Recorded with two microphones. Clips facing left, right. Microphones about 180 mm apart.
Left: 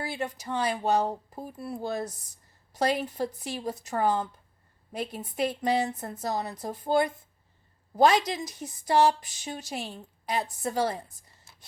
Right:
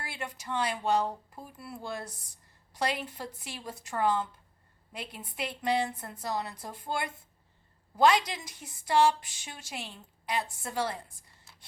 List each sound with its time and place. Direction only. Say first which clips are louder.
0.0 s speech: left 7 dB; 40° left (ahead or behind)
8.3 s speech: left 8 dB; 40° left (ahead or behind)